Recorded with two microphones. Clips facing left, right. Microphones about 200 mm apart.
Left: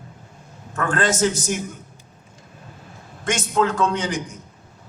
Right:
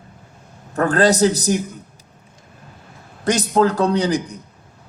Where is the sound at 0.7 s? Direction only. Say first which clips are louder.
Right 6 dB; 35° right (ahead or behind).